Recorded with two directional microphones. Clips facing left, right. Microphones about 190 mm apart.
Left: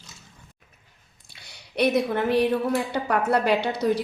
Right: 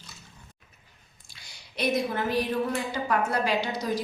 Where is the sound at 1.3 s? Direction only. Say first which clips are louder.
Left 8 dB; 65° left (ahead or behind).